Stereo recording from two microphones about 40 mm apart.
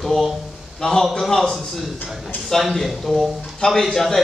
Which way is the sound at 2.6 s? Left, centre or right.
Centre.